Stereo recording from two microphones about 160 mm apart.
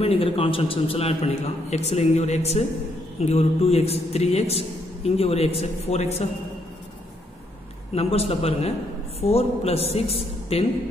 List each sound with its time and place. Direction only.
0.0 s a man's voice: 35° left (ahead or behind)
7.9 s a man's voice: 40° left (ahead or behind)